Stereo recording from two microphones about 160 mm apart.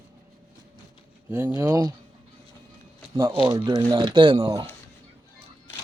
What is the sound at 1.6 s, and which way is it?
Speech, 20° right (ahead or behind).